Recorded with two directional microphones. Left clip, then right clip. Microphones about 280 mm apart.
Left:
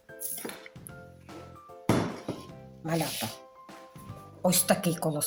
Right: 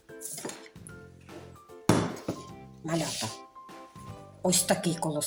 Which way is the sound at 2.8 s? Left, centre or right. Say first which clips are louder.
Even; centre.